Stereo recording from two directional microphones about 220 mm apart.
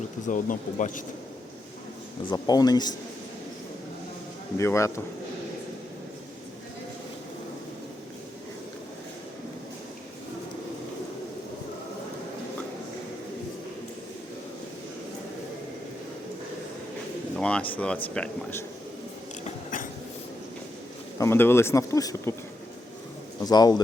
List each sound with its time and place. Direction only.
0.3 s speech: 35° left (ahead or behind)
2.3 s speech: 15° left (ahead or behind)
4.5 s speech: 15° left (ahead or behind)
17.3 s speech: 5° left (ahead or behind)
19.5 s a sound: 35° left (ahead or behind)
21.2 s speech: 10° left (ahead or behind)
23.4 s a man's voice: 20° left (ahead or behind)